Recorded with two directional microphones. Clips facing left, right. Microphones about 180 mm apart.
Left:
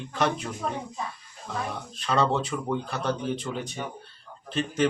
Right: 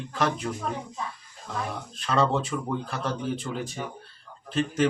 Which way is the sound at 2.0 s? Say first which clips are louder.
Even; centre (ahead or behind).